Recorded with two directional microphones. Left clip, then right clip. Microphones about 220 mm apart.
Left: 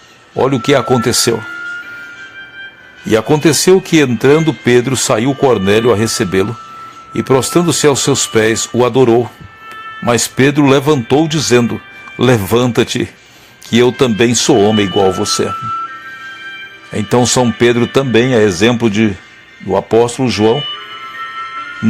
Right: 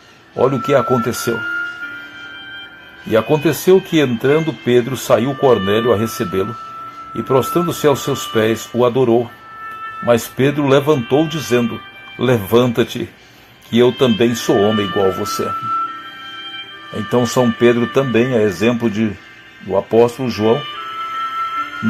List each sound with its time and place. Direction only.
0.3 s speech: 35° left (ahead or behind)
3.1 s speech: 40° left (ahead or behind)
16.9 s speech: 35° left (ahead or behind)